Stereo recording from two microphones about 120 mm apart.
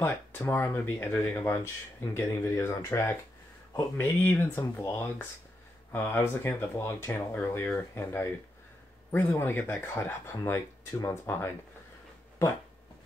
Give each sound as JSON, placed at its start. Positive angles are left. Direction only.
{"t": 0.0, "sound": "speech", "side_deg": 20}